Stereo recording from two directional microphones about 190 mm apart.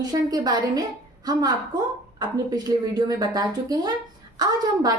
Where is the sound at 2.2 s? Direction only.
20° right (ahead or behind).